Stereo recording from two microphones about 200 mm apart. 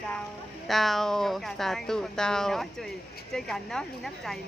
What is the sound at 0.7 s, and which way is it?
Speech, centre (ahead or behind).